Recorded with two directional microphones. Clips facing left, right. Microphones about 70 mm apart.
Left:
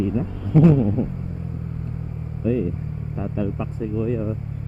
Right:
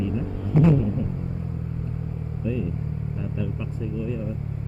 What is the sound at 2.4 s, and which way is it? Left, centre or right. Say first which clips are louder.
Speech: left 6 dB; left.